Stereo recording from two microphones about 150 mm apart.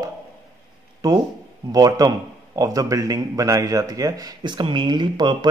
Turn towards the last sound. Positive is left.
turn(degrees=-30)  # may be behind; listen again after turning